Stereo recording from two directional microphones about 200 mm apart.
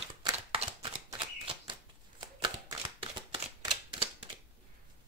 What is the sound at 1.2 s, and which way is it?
Shuffling cards, 25° right (ahead or behind).